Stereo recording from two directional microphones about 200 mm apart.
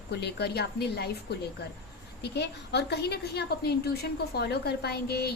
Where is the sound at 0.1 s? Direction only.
55° left (ahead or behind).